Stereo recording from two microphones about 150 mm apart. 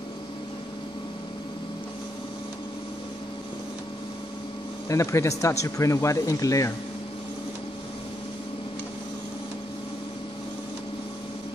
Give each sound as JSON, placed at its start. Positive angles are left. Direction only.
{"t": 4.8, "sound": "speech", "side_deg": 20}